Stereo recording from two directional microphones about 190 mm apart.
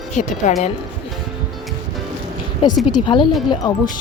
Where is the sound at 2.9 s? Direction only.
25° left (ahead or behind).